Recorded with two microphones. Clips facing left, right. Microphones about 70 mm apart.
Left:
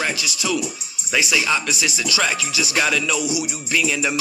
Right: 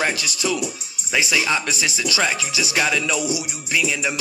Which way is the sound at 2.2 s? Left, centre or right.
Right.